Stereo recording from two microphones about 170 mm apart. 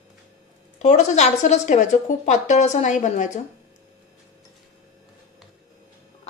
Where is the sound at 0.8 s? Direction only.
45° left (ahead or behind).